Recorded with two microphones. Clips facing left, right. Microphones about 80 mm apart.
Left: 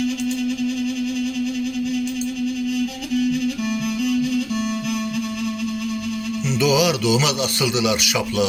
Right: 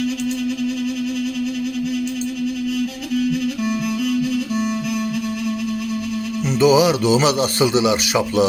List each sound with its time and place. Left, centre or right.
6.6 s speech: right